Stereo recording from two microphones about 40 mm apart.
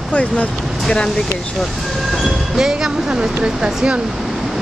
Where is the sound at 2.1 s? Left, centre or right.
Centre.